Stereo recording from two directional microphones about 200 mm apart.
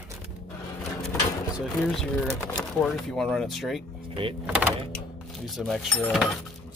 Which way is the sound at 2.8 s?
Centre (ahead or behind).